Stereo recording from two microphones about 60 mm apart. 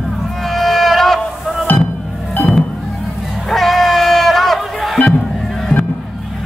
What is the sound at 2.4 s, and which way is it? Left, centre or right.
Music, left.